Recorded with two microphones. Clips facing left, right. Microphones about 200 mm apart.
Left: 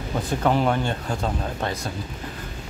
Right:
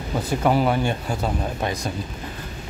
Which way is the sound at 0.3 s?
5° right (ahead or behind).